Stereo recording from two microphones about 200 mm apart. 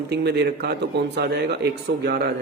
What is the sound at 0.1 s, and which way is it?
A man's voice, 55° right (ahead or behind).